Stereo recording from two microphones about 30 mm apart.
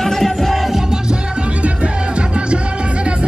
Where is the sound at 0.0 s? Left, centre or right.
Centre.